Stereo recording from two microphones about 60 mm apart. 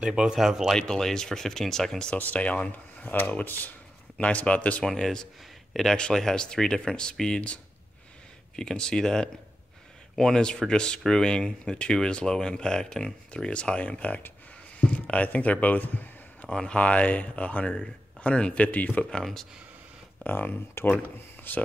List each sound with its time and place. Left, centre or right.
0.0 s speech: centre
0.7 s speech: centre
2.1 s speech: left
4.8 s a man's voice: centre; by 16.4 s left
16.4 s speech: centre
16.7 s speech: centre
19.0 s speech: centre
20.2 s speech: left
20.9 s speech: left